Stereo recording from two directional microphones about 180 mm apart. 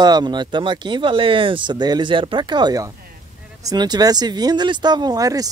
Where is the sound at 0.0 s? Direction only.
25° right (ahead or behind).